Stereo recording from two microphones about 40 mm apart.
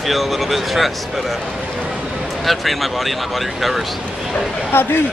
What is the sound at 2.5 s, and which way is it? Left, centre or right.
Speech, centre.